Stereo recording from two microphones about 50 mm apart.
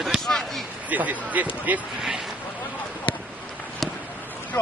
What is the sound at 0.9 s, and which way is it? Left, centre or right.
Speech, right.